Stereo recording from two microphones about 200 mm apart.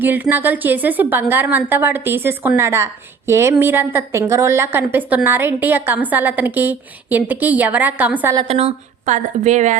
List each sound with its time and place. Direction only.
0.0 s a woman's voice: 10° right (ahead or behind)
8.4 s a woman's voice: 30° right (ahead or behind)